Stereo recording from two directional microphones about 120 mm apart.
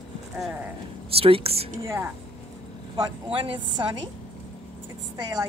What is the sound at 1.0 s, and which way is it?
Speech, 50° right (ahead or behind).